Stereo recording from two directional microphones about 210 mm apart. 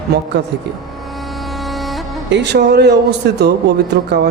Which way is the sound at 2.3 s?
55° right (ahead or behind).